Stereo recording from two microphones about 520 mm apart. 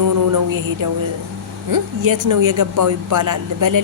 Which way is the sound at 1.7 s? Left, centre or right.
Right.